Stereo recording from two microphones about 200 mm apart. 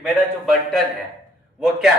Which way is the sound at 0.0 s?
Centre (ahead or behind).